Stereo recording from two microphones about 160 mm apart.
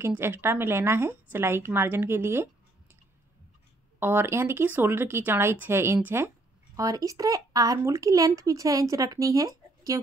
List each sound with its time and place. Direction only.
0.0 s speech: 15° right (ahead or behind)
4.0 s speech: 15° right (ahead or behind)